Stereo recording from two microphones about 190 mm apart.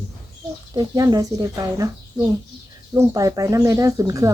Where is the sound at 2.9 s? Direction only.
20° right (ahead or behind).